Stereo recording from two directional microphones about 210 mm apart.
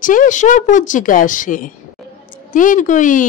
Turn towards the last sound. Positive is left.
turn(degrees=40)  # may be behind; listen again after turning